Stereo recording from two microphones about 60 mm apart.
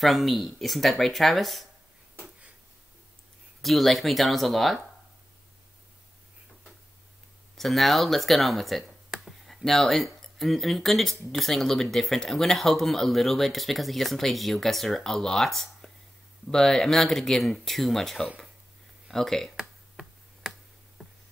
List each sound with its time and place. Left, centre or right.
0.0 s speech: centre
3.6 s speech: centre
7.5 s speech: centre
21.0 s a sound: centre